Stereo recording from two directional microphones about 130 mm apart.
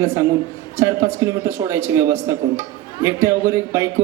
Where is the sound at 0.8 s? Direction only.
20° right (ahead or behind).